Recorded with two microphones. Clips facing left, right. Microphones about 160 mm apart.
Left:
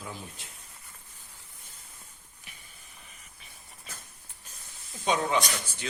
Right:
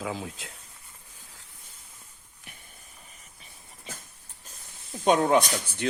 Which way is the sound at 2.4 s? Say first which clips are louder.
Right 4 dB; 55° right (ahead or behind).